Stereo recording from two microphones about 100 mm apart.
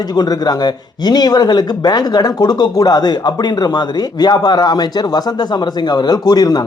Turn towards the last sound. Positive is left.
turn(degrees=40)  # may be behind; listen again after turning